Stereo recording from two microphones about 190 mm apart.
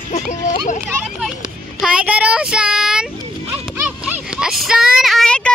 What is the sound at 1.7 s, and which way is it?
Speech, 5° right (ahead or behind).